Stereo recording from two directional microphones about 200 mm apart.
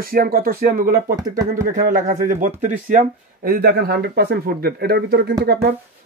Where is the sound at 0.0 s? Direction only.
45° right (ahead or behind).